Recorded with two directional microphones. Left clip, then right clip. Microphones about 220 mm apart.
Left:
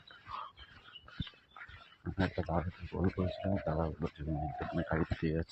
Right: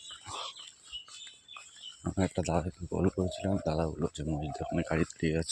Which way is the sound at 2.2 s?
45° right (ahead or behind).